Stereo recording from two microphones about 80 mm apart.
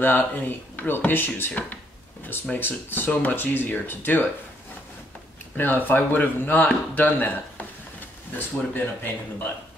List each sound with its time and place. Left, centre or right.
0.0 s speech: left
5.6 s speech: left